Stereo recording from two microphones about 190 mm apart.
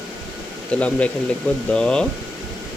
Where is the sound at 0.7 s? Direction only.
5° left (ahead or behind).